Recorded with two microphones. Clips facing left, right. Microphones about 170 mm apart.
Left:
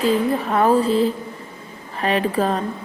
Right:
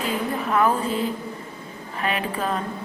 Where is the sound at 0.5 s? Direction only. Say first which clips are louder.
Left 5 dB; 35° left (ahead or behind).